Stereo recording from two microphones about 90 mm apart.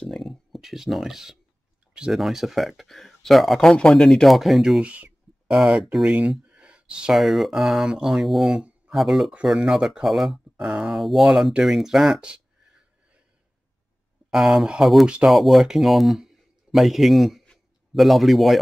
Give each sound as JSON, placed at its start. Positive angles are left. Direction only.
{"t": 0.0, "sound": "a sound", "side_deg": 0}
{"t": 2.0, "sound": "speech", "side_deg": -5}
{"t": 4.9, "sound": "a sound", "side_deg": -15}
{"t": 5.7, "sound": "speech", "side_deg": -5}
{"t": 7.2, "sound": "speech", "side_deg": 0}
{"t": 14.3, "sound": "speech", "side_deg": -5}